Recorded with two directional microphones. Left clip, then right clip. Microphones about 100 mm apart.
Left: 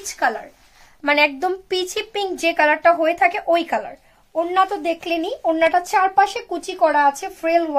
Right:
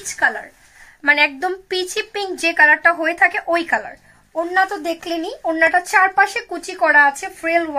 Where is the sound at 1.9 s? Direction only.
50° left (ahead or behind).